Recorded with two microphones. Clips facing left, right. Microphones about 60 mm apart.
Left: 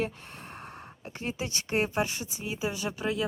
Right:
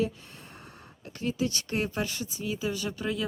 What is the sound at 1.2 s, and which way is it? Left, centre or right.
A woman's voice, left.